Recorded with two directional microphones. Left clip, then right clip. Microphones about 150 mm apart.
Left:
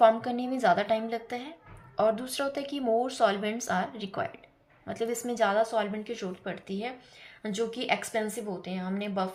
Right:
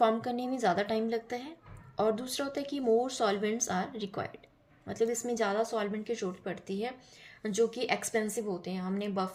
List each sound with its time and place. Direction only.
0.0 s speech: 35° right (ahead or behind)